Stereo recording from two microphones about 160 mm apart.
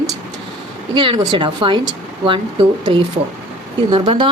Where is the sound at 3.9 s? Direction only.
35° right (ahead or behind).